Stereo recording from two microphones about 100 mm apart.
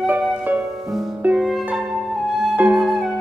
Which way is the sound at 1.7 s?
5° right (ahead or behind).